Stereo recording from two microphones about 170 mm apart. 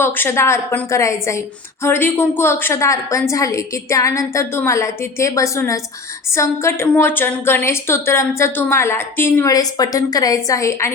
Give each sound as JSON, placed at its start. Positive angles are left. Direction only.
{"t": 0.0, "sound": "a woman's voice", "side_deg": 15}